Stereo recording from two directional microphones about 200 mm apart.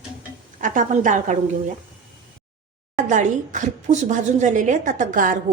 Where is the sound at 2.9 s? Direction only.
40° right (ahead or behind).